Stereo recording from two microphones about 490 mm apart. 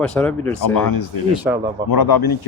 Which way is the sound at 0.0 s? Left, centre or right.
Centre.